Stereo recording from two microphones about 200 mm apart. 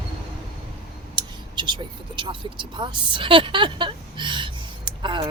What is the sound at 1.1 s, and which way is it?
Speech, 25° right (ahead or behind).